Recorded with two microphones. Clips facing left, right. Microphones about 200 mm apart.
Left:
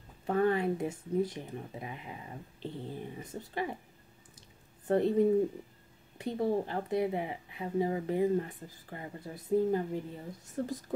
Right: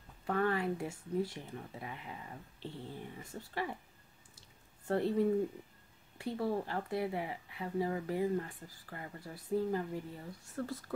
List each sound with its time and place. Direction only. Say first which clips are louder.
0.3 s speech: left 5 dB; 25° left (ahead or behind)
4.4 s a sound: left 4 dB; 20° left (ahead or behind)
6.1 s speech: left 4 dB; 20° left (ahead or behind)